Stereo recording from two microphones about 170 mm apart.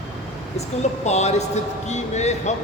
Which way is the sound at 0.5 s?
40° left (ahead or behind).